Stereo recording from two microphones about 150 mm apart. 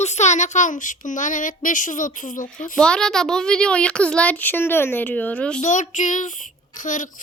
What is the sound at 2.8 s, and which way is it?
A child's voice, 5° left (ahead or behind).